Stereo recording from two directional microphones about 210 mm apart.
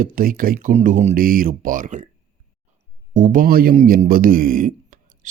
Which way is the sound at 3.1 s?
40° right (ahead or behind).